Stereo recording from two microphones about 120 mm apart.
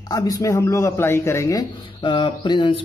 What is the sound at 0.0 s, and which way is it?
Speech, 30° left (ahead or behind).